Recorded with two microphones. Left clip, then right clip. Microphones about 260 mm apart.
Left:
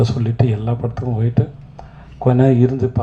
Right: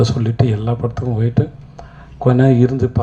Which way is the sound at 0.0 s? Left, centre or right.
Right.